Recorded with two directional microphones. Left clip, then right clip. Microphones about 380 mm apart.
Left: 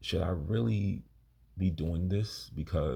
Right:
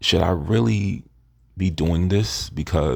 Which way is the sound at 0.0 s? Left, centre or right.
Centre.